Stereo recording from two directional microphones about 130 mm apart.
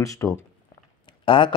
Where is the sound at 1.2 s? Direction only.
40° left (ahead or behind).